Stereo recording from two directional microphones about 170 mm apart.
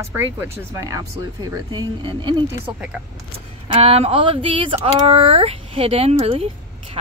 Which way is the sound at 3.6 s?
35° right (ahead or behind).